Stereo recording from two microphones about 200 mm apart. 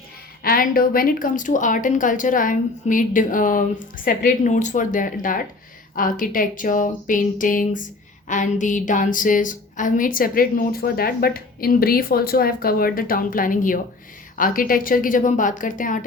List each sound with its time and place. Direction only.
0.4 s a woman's voice: 45° left (ahead or behind)